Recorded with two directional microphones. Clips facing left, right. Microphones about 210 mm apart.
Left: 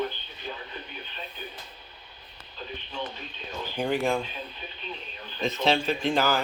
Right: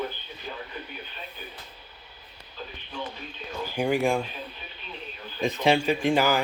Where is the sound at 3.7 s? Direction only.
10° right (ahead or behind).